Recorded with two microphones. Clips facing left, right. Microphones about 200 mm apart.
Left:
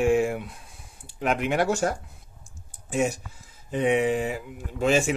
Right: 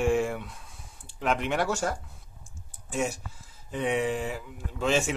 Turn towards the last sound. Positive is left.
turn(degrees=15)  # may be behind; listen again after turning